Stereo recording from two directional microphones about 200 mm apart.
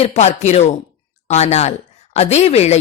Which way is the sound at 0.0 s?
35° left (ahead or behind).